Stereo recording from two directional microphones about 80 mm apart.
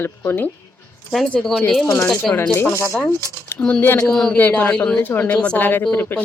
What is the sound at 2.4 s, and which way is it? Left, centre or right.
Speech, left.